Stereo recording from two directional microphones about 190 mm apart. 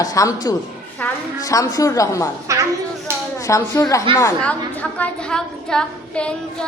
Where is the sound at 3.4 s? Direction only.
20° left (ahead or behind).